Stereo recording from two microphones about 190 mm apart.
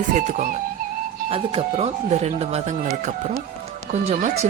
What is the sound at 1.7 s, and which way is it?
Speech, 35° right (ahead or behind).